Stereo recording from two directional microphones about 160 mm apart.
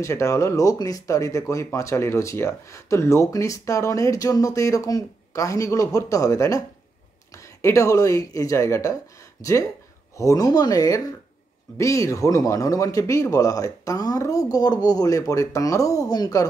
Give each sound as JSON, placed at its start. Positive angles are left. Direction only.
{"t": 0.0, "sound": "speech", "side_deg": 20}